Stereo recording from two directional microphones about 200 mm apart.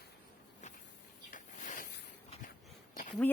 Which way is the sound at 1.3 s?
40° left (ahead or behind).